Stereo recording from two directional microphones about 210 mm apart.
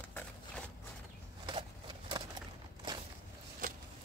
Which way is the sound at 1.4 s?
20° right (ahead or behind).